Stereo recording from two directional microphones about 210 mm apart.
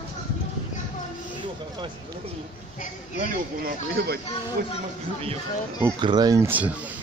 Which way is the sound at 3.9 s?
50° right (ahead or behind).